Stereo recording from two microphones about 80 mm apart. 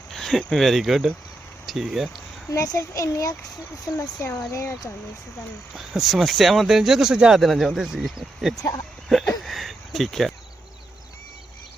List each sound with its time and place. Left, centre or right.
0.1 s speech: centre
2.5 s a child's voice: left
5.7 s speech: centre
8.5 s speech: left
9.0 s a sound: centre
9.4 s cricket: centre